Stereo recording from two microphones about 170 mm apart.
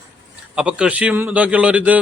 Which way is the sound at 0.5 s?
5° right (ahead or behind).